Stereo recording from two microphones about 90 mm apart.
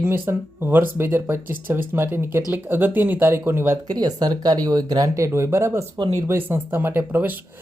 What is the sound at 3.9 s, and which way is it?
Speech, 50° right (ahead or behind).